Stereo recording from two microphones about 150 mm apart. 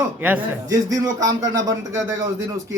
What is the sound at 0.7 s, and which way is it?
A man's voice, 25° right (ahead or behind).